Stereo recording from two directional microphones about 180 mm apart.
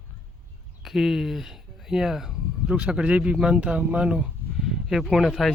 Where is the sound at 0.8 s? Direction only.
Centre (ahead or behind).